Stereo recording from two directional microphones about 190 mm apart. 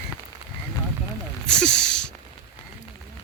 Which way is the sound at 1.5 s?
5° left (ahead or behind).